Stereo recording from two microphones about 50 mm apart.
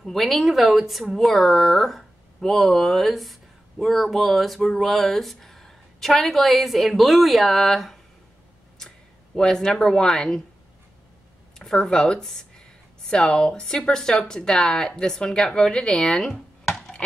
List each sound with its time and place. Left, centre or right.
0.0 s speech: centre
8.7 s speech: centre
11.6 s speech: centre